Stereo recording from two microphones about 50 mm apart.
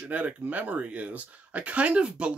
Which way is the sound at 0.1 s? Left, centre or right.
Right.